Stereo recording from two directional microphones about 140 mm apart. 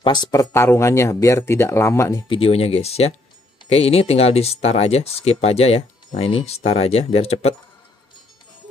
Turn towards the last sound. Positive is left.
turn(degrees=50)  # may be behind; listen again after turning